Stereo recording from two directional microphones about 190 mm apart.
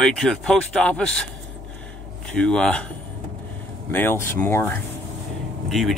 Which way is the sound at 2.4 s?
5° left (ahead or behind).